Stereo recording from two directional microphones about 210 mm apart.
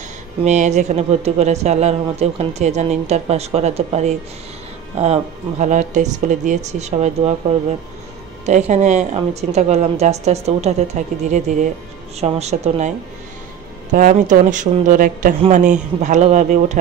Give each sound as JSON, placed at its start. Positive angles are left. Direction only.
{"t": 0.5, "sound": "speech", "side_deg": -35}
{"t": 13.9, "sound": "speech", "side_deg": -40}